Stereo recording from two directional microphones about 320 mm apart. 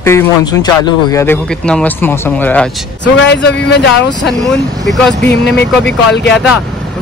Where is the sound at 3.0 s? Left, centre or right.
Left.